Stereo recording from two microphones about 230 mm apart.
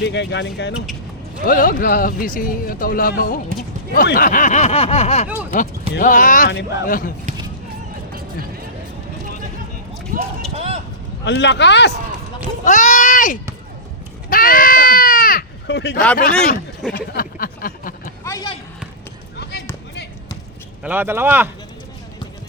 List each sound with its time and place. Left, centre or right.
0.0 s speech: left
1.5 s speech: left
6.5 s speech: left
10.1 s speech: right
10.5 s vehicle: right
11.3 s speech: left
12.6 s speech: left
14.3 s a sound: left
17.1 s a sound: left
18.2 s vehicle: centre
19.4 s a sound: left
20.8 s speech: centre